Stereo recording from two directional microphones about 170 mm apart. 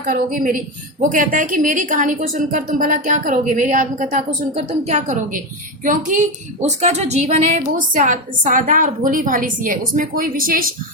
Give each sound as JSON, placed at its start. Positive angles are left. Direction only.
{"t": 0.0, "sound": "a woman's voice", "side_deg": -55}